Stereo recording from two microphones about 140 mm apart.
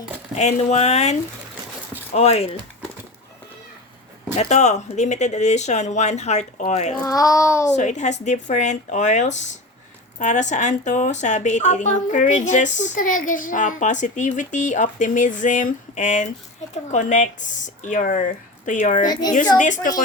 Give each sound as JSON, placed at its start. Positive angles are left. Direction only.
{"t": 0.3, "sound": "speech", "side_deg": 50}
{"t": 2.1, "sound": "speech", "side_deg": 45}
{"t": 4.4, "sound": "a woman's voice", "side_deg": 55}
{"t": 7.0, "sound": "a child's voice", "side_deg": 25}
{"t": 7.8, "sound": "a woman's voice", "side_deg": 60}
{"t": 19.0, "sound": "a child's voice", "side_deg": 30}
{"t": 19.5, "sound": "a woman's voice", "side_deg": 65}